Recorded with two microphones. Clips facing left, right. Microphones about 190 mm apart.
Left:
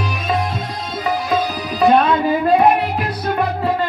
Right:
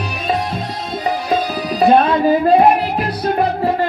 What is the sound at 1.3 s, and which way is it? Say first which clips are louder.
Music: right 2 dB; 35° right (ahead or behind).